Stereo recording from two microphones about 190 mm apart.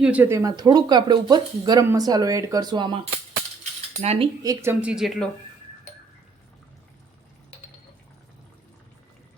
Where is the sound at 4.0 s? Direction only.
35° right (ahead or behind).